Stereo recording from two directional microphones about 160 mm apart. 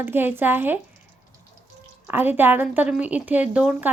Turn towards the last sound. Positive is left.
turn(degrees=-10)  # may be behind; listen again after turning